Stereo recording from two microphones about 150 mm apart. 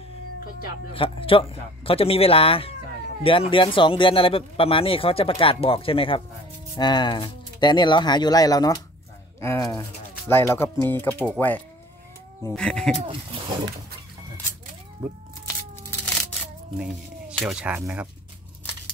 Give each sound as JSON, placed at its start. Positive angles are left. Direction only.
{"t": 0.9, "sound": "a man's voice", "side_deg": 35}
{"t": 15.0, "sound": "speech", "side_deg": -15}
{"t": 16.7, "sound": "a sound", "side_deg": -5}
{"t": 17.4, "sound": "speech", "side_deg": -5}
{"t": 17.7, "sound": "speech", "side_deg": -15}